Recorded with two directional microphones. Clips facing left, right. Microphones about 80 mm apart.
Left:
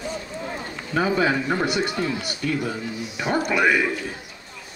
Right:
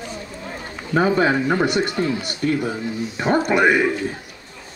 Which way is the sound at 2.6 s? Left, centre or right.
Right.